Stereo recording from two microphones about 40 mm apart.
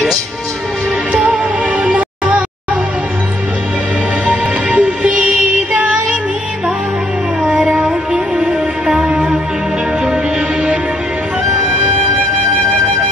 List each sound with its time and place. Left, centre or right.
1.1 s music: right
4.3 s music: right
7.4 s music: right